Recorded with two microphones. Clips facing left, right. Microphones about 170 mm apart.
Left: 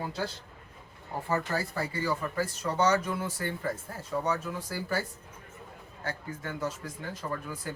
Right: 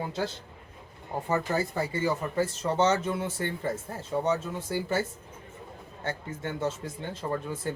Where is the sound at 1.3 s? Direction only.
20° right (ahead or behind).